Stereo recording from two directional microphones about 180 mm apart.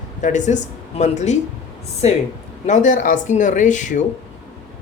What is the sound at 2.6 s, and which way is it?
Speech, 40° left (ahead or behind).